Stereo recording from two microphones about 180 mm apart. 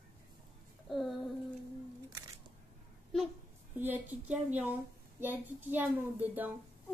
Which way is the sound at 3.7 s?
10° right (ahead or behind).